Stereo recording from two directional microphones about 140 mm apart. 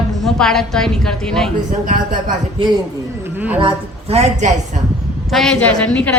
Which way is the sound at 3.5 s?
40° right (ahead or behind).